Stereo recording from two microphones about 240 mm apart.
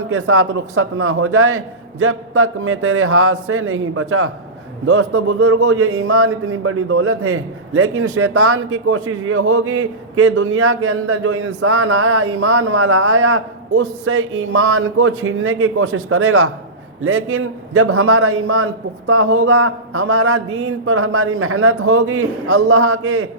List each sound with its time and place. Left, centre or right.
0.1 s a man's voice: right